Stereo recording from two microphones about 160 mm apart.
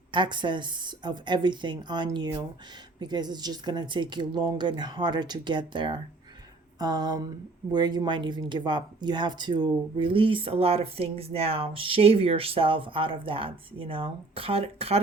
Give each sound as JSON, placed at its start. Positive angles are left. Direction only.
{"t": 0.1, "sound": "speech", "side_deg": -30}